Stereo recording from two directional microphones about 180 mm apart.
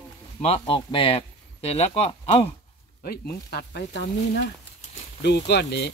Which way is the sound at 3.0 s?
60° left (ahead or behind).